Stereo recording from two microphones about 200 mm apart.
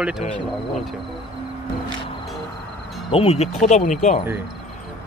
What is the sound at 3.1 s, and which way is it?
Speech, 30° left (ahead or behind).